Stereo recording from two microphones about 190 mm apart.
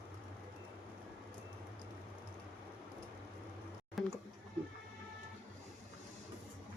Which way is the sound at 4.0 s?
Centre (ahead or behind).